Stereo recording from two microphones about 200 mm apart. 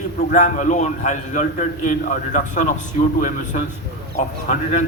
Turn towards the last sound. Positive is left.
turn(degrees=35)  # may be behind; listen again after turning